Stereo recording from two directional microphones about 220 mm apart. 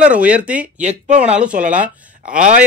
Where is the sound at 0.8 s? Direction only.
30° right (ahead or behind).